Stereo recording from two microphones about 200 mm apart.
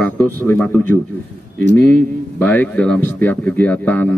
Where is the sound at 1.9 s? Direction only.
5° left (ahead or behind).